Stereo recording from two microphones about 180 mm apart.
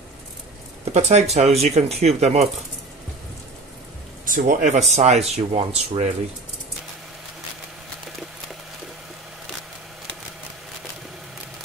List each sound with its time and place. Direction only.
0.9 s speech: 40° right (ahead or behind)
4.3 s speech: 45° right (ahead or behind); by 6.1 s 30° right (ahead or behind)